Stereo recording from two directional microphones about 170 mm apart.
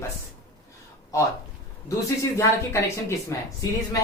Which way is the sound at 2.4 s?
15° left (ahead or behind).